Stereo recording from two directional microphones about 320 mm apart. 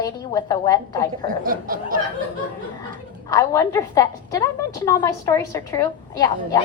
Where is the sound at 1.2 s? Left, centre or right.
Right.